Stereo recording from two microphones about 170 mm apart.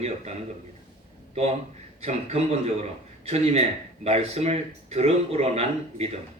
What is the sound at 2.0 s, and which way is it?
Speech, 40° right (ahead or behind).